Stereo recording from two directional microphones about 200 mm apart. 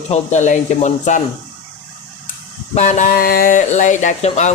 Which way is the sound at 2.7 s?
40° left (ahead or behind).